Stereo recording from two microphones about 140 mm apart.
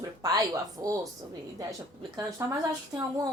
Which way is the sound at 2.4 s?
20° right (ahead or behind).